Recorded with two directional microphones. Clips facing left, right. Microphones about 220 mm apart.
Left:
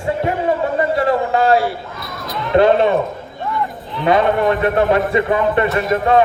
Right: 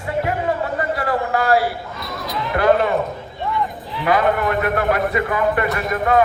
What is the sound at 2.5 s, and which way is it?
Speech, 25° left (ahead or behind).